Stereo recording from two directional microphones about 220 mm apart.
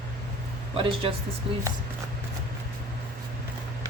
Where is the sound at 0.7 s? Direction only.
25° right (ahead or behind).